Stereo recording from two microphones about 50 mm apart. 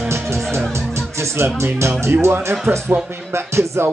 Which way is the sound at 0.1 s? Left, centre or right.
Right.